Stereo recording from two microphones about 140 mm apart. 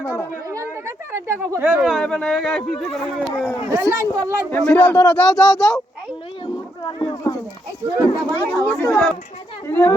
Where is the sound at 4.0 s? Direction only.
25° right (ahead or behind).